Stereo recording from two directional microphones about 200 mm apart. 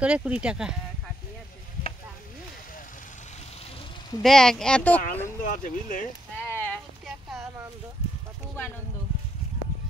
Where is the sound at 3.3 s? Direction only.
30° left (ahead or behind).